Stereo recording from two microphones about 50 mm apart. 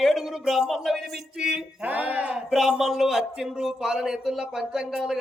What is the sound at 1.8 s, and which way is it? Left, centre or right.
Speech, right.